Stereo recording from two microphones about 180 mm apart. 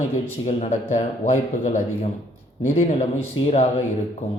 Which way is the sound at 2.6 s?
40° left (ahead or behind).